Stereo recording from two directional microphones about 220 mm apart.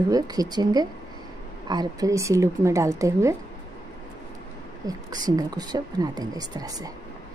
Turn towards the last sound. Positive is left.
turn(degrees=-15)  # may be behind; listen again after turning